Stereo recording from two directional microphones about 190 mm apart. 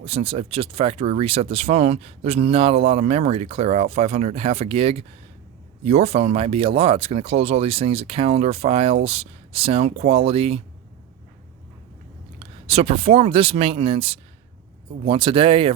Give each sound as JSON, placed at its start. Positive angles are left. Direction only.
{"t": 0.0, "sound": "speech", "side_deg": -30}
{"t": 12.4, "sound": "speech", "side_deg": -30}